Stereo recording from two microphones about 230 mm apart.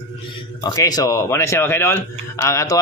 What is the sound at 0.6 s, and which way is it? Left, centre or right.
Speech, centre.